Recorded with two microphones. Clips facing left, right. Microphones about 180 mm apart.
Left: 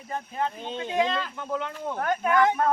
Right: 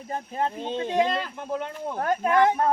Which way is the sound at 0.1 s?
35° right (ahead or behind).